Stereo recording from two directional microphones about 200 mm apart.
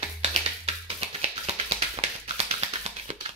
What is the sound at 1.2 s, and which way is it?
Music, 30° right (ahead or behind).